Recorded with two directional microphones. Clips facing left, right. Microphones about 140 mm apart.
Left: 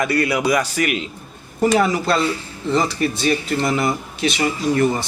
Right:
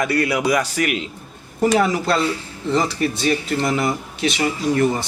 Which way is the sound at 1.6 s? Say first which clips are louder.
Even; 15° left (ahead or behind).